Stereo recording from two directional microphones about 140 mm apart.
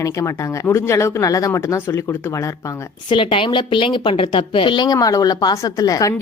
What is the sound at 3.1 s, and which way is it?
Speech, 35° left (ahead or behind).